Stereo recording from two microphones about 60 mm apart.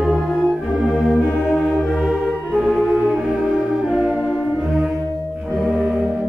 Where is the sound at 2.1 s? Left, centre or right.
Centre.